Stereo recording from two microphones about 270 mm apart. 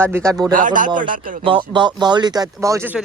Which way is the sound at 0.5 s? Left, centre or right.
Right.